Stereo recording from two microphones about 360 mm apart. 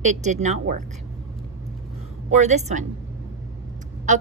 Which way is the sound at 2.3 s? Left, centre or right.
Centre.